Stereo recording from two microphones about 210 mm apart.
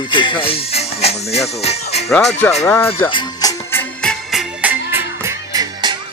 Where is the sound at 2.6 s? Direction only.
10° left (ahead or behind).